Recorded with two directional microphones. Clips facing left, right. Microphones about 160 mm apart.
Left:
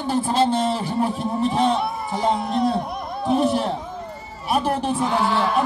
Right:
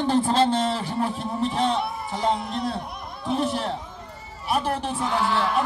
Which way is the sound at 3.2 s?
45° left (ahead or behind).